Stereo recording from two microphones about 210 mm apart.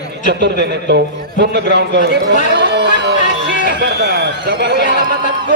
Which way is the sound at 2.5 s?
55° right (ahead or behind).